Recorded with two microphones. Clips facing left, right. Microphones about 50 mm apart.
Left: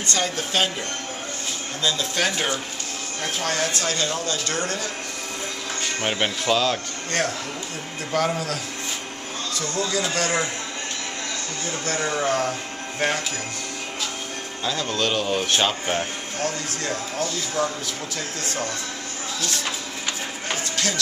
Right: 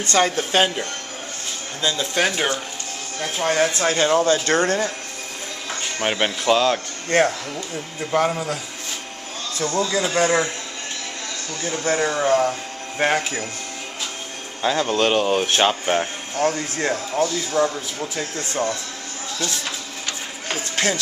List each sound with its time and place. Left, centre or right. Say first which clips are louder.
0.0 s speech: right 6 dB; right
1.8 s speech: right 3 dB; centre; by 4.9 s right
5.9 s speech: right 3 dB; centre
7.1 s speech: right 7 dB; right
8.3 s speech: right 1 dB; centre
9.8 s speech: right 5 dB; centre
11.8 s speech: right 4 dB; right
13.0 s speech: right 4 dB; right
14.6 s speech: right 6 dB; right
16.3 s speech: right 7 dB; right
20.7 s a sound: right 7 dB; right